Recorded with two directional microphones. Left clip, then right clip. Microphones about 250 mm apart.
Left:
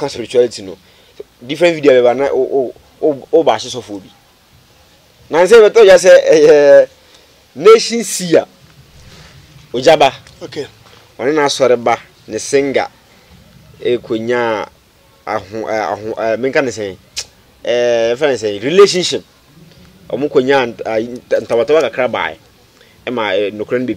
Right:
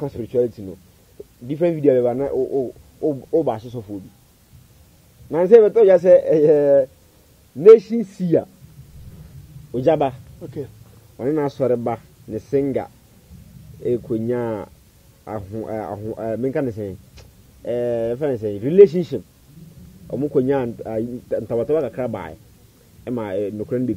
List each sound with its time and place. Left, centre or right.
0.0 s speech: centre
2.3 s speech: left
3.4 s speech: centre
3.7 s speech: left
5.3 s speech: centre
9.8 s speech: centre
14.1 s speech: centre
20.3 s speech: centre